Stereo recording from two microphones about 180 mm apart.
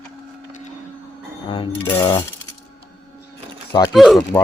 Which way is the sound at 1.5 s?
30° left (ahead or behind).